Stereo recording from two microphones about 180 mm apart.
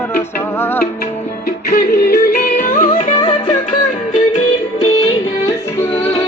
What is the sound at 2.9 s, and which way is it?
Music, 35° left (ahead or behind).